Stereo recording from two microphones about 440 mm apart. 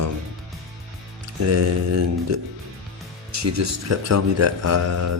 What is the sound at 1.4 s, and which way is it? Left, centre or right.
Speech, right.